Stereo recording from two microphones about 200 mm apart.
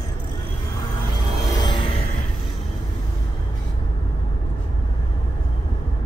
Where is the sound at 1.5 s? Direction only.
20° left (ahead or behind).